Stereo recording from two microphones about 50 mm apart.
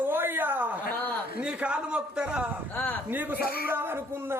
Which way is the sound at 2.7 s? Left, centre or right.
Left.